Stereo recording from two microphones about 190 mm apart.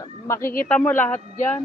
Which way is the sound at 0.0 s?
15° left (ahead or behind).